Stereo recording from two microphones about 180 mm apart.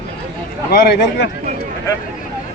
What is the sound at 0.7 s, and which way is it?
Speech, 65° left (ahead or behind).